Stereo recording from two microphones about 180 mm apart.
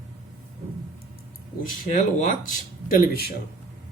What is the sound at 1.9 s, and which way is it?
Speech, 45° left (ahead or behind).